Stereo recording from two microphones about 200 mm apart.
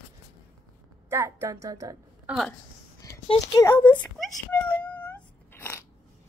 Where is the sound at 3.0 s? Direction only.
15° left (ahead or behind).